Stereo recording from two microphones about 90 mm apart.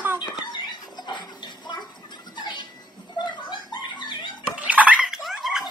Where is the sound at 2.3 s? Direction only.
55° left (ahead or behind).